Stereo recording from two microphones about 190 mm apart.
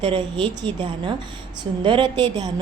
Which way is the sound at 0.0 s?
25° right (ahead or behind).